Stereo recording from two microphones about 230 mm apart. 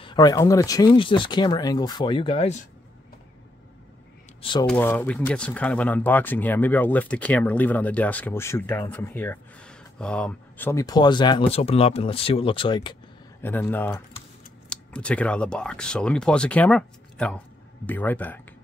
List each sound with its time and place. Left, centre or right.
0.0 s speech: centre
4.4 s speech: left
4.6 s speech: centre
13.4 s speech: centre